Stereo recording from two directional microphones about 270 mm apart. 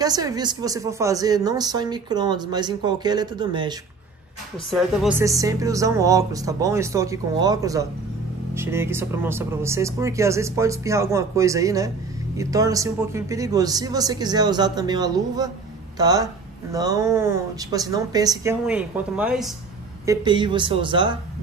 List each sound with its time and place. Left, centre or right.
0.0 s speech: centre
4.6 s a woman's voice: centre
5.2 s speech: centre
20.1 s speech: centre